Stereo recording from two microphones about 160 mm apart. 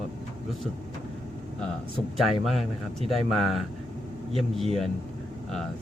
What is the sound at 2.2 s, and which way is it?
Speech, centre (ahead or behind).